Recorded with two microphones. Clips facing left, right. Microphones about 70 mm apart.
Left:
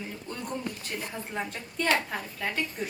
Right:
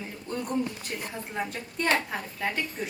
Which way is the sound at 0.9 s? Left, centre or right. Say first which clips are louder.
Right 2 dB; centre.